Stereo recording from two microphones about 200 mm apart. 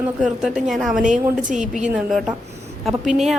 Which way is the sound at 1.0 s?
40° right (ahead or behind).